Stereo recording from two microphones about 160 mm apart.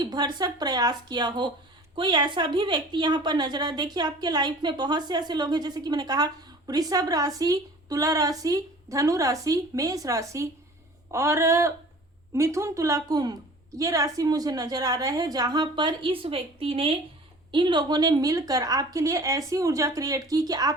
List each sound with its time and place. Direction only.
0.0 s a woman's voice: 25° right (ahead or behind)